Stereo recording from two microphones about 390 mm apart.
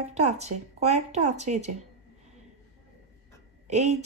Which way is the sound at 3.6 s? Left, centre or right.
Centre.